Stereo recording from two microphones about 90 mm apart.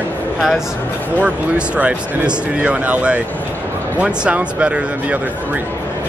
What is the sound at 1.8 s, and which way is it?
Speech, 15° right (ahead or behind).